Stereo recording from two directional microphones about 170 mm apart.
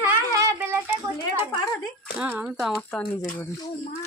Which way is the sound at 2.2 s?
5° right (ahead or behind).